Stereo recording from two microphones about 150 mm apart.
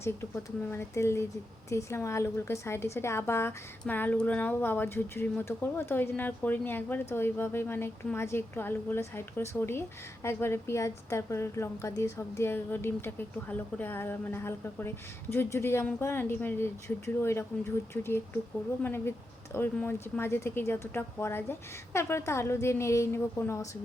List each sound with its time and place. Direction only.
0.0 s a woman's voice: 15° left (ahead or behind)